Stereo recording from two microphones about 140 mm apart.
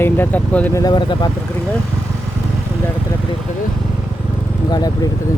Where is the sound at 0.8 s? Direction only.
30° left (ahead or behind).